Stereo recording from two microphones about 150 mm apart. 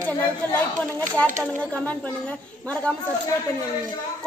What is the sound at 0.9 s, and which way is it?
Speech, 10° left (ahead or behind).